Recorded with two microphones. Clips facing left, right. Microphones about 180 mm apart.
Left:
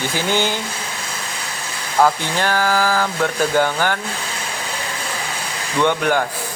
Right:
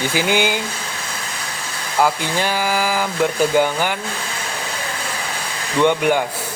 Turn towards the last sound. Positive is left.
turn(degrees=-15)  # may be behind; listen again after turning